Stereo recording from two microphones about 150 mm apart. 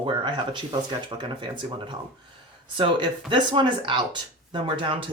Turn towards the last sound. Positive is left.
turn(degrees=-35)  # may be behind; listen again after turning